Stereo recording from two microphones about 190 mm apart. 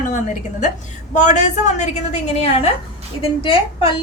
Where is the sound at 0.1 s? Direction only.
40° left (ahead or behind).